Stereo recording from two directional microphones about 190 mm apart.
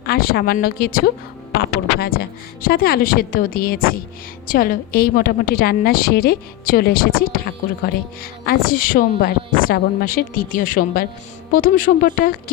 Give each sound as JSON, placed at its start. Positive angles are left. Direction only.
{"t": 0.0, "sound": "a woman's voice", "side_deg": 55}